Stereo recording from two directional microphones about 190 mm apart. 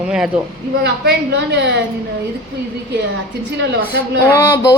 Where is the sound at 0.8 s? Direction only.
65° right (ahead or behind).